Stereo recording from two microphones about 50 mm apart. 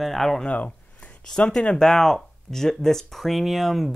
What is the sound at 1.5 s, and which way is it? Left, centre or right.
Speech, centre.